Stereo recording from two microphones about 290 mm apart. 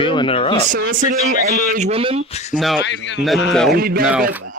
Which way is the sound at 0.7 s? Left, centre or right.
Right.